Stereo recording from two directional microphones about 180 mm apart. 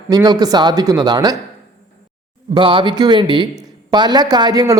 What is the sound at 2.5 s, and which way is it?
Speech, 30° right (ahead or behind).